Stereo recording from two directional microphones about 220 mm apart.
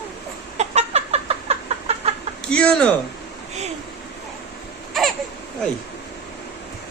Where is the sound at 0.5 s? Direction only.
30° right (ahead or behind).